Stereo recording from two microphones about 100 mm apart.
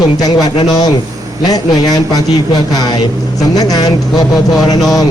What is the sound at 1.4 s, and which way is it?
Speech, 40° left (ahead or behind).